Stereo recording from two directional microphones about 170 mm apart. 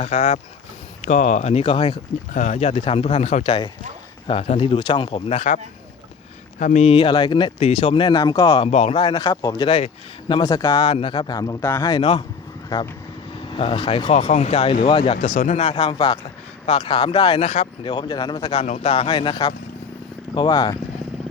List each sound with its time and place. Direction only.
1.0 s speech: 45° left (ahead or behind)
2.3 s speech: 45° left (ahead or behind)
6.6 s speech: 45° left (ahead or behind); by 10.8 s 25° left (ahead or behind)
10.8 s speech: 35° left (ahead or behind)
15.4 s speech: 45° left (ahead or behind)
15.6 s speech: 30° left (ahead or behind)
18.4 s speech: 35° left (ahead or behind)